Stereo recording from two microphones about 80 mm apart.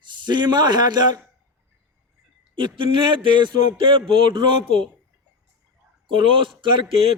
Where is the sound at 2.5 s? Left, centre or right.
Right.